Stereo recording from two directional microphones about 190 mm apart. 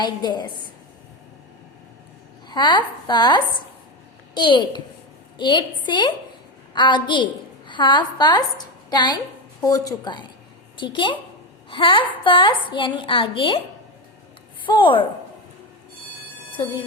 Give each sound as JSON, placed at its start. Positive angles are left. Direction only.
{"t": 0.0, "sound": "a woman's voice", "side_deg": 20}
{"t": 2.5, "sound": "a woman's voice", "side_deg": 25}
{"t": 14.7, "sound": "a woman's voice", "side_deg": 25}
{"t": 16.6, "sound": "a woman's voice", "side_deg": 20}